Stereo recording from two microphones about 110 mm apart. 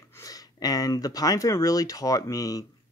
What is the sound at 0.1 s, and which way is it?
Speech, 30° left (ahead or behind).